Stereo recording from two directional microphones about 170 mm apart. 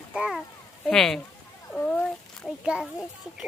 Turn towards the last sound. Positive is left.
turn(degrees=-5)  # may be behind; listen again after turning